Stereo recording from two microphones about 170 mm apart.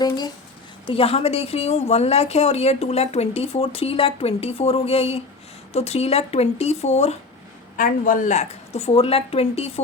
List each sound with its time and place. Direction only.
0.9 s speech: 35° left (ahead or behind)
7.8 s speech: 55° left (ahead or behind); by 9.8 s 35° left (ahead or behind)